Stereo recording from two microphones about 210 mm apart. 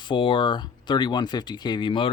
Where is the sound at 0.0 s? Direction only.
25° left (ahead or behind).